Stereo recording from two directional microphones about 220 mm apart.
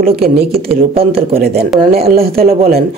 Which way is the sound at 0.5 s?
25° right (ahead or behind).